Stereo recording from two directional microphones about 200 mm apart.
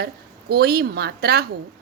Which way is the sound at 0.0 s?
50° right (ahead or behind).